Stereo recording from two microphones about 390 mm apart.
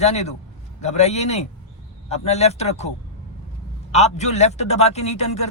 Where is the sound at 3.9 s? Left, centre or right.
Centre.